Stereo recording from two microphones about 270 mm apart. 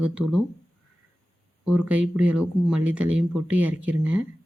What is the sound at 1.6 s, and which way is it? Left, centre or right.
Speech, centre.